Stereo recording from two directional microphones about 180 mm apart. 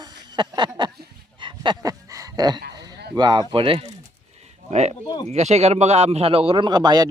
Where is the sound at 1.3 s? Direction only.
25° right (ahead or behind).